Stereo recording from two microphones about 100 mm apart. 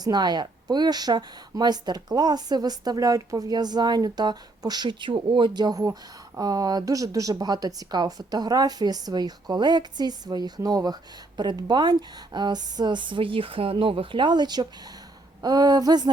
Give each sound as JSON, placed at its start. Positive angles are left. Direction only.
{"t": 0.0, "sound": "speech", "side_deg": -45}
{"t": 5.8, "sound": "speech", "side_deg": -35}